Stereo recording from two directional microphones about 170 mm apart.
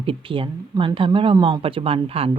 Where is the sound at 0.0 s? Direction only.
30° right (ahead or behind).